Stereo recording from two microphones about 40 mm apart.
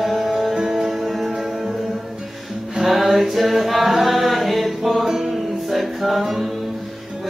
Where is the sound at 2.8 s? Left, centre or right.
Centre.